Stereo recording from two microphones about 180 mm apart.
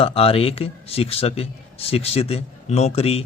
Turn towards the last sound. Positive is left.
turn(degrees=35)  # may be behind; listen again after turning